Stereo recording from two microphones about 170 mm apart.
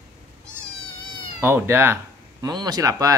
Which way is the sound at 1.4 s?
15° right (ahead or behind).